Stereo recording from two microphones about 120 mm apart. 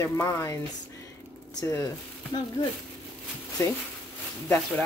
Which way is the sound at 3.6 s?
25° left (ahead or behind).